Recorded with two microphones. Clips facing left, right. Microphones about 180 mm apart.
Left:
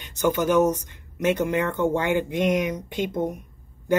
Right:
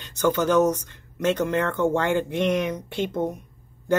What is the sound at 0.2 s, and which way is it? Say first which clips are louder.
Speech: even; 15° left (ahead or behind).